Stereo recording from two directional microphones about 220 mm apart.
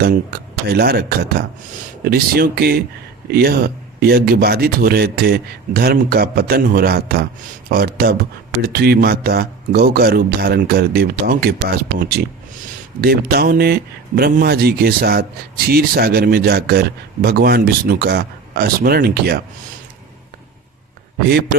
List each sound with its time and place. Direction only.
0.0 s speech: 45° right (ahead or behind)